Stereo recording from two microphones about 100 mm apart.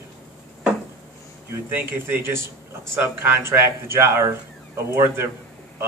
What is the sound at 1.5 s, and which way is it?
A man's voice, 20° right (ahead or behind).